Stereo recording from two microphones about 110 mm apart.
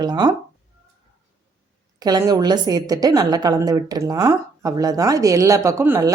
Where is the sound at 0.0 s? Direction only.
40° right (ahead or behind).